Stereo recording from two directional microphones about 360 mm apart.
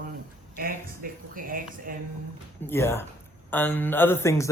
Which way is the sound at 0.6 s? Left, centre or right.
Right.